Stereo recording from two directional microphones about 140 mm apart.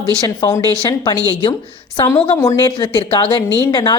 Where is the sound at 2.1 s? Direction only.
45° left (ahead or behind).